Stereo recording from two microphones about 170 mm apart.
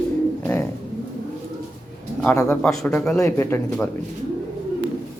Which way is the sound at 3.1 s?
15° left (ahead or behind).